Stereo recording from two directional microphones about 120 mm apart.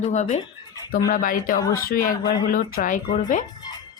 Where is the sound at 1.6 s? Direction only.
25° left (ahead or behind).